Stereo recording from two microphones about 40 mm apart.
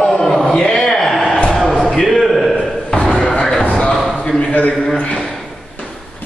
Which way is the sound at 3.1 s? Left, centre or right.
Centre.